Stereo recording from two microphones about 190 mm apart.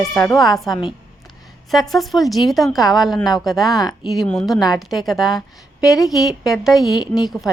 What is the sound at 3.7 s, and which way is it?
Speech, 20° left (ahead or behind).